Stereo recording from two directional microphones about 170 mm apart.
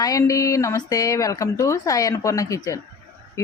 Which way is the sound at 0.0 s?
20° left (ahead or behind).